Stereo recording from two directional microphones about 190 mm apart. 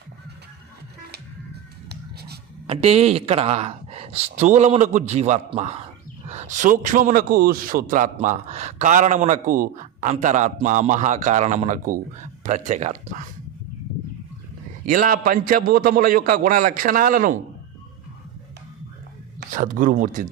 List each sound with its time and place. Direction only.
1.9 s writing: 55° right (ahead or behind)
2.6 s a man's voice: 30° right (ahead or behind)
14.8 s a man's voice: 45° right (ahead or behind)
19.5 s a man's voice: 45° right (ahead or behind)